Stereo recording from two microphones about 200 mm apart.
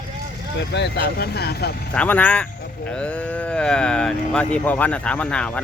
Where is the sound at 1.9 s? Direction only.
5° left (ahead or behind).